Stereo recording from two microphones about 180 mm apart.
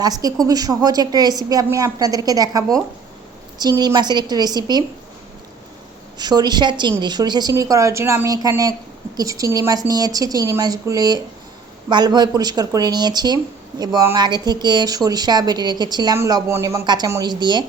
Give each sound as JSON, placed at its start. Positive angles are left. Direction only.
{"t": 0.0, "sound": "speech", "side_deg": -20}
{"t": 6.1, "sound": "speech", "side_deg": -25}